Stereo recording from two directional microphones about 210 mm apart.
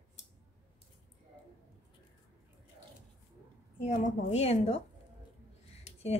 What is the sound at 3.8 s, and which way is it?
Speech, 30° left (ahead or behind).